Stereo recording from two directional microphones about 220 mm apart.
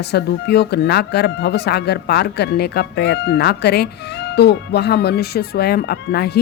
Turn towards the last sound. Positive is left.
turn(degrees=45)  # may be behind; listen again after turning